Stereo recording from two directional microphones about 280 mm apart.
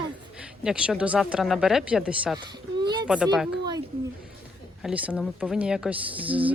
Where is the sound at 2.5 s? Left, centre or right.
Centre.